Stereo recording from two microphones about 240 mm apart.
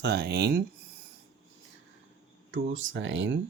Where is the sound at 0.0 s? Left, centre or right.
Right.